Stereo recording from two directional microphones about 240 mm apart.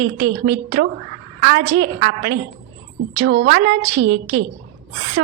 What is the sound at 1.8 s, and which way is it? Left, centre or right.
A woman's voice, right.